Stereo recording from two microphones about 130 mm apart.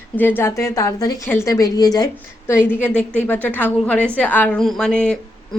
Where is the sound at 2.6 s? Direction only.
15° left (ahead or behind).